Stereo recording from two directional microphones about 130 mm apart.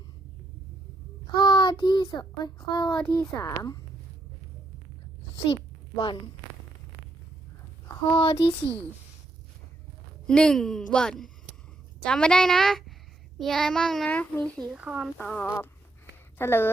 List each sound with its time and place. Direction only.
1.3 s a child's voice: 35° left (ahead or behind)
8.1 s speech: 40° left (ahead or behind)
10.2 s a child's voice: 5° left (ahead or behind)
14.8 s a child's voice: 5° right (ahead or behind)
15.2 s a woman's voice: 10° left (ahead or behind)